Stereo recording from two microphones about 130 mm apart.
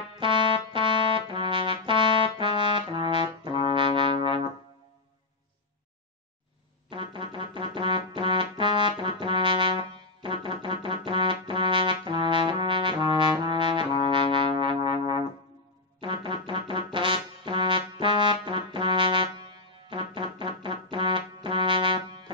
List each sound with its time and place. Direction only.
0.2 s music: 40° right (ahead or behind)
1.3 s brass instrument: 40° right (ahead or behind)
6.9 s music: 40° right (ahead or behind)
16.0 s brass instrument: 40° right (ahead or behind)
19.9 s music: 40° right (ahead or behind)